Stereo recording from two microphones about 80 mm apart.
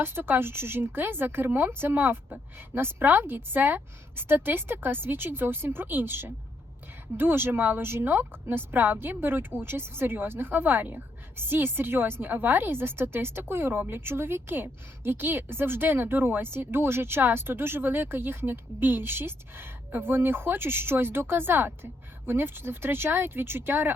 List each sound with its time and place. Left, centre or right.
0.0 s a woman's voice: right